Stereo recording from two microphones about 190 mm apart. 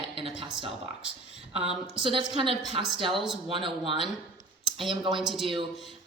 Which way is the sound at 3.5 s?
25° right (ahead or behind).